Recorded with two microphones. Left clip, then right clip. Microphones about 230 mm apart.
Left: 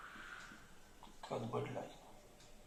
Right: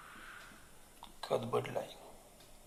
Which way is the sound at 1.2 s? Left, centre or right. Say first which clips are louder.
Right 8 dB; right.